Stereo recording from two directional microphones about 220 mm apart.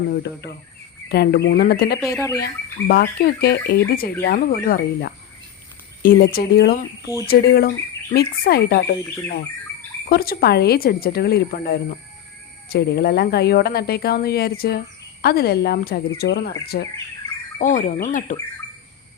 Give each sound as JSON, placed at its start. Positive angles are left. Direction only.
{"t": 0.1, "sound": "speech", "side_deg": 50}
{"t": 2.0, "sound": "speech", "side_deg": 0}
{"t": 2.4, "sound": "speech", "side_deg": 45}
{"t": 10.1, "sound": "speech", "side_deg": 45}